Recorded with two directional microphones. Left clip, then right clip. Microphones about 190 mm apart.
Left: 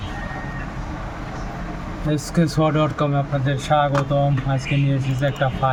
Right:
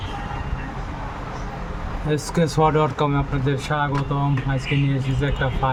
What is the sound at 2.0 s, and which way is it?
Speech, 10° right (ahead or behind).